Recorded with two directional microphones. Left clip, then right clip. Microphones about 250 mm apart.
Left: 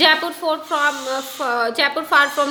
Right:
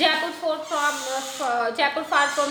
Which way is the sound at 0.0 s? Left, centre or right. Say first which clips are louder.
Left 6 dB; left.